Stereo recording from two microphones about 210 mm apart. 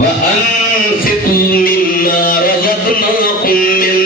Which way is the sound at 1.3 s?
45° left (ahead or behind).